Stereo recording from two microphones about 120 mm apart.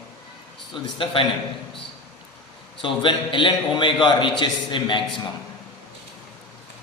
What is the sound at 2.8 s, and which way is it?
A man's voice, 45° left (ahead or behind).